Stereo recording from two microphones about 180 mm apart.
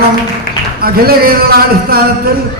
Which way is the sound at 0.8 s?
55° right (ahead or behind).